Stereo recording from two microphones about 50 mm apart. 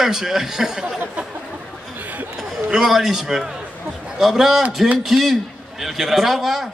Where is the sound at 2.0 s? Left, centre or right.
Right.